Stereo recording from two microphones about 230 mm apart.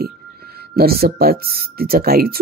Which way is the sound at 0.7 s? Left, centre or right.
Right.